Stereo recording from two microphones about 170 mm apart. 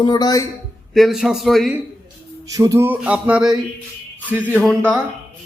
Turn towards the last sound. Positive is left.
turn(degrees=5)  # may be behind; listen again after turning